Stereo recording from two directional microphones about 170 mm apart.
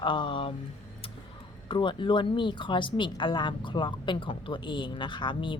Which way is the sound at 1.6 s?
30° left (ahead or behind).